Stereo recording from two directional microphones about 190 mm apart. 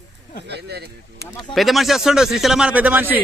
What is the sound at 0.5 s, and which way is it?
Speech, 60° right (ahead or behind).